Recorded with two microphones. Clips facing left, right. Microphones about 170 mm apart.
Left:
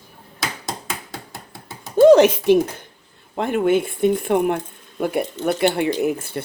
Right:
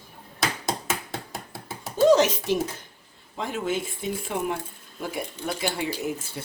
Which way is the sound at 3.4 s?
60° left (ahead or behind).